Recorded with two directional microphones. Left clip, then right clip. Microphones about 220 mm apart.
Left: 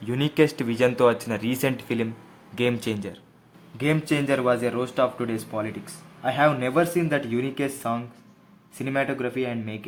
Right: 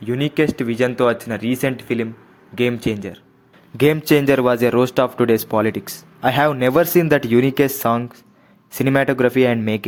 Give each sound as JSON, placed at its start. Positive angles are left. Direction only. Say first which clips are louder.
{"t": 0.0, "sound": "speech", "louder": "right 3 dB", "side_deg": -10}
{"t": 3.8, "sound": "speech", "louder": "right 9 dB", "side_deg": -35}